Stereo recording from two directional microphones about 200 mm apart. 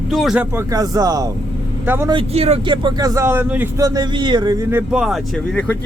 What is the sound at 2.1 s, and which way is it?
Speech, 30° right (ahead or behind).